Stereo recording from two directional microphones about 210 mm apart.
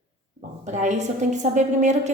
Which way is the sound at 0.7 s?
35° right (ahead or behind).